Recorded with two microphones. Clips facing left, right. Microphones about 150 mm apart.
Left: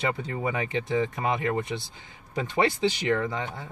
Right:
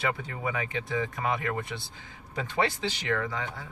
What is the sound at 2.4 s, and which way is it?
Speech, 15° left (ahead or behind).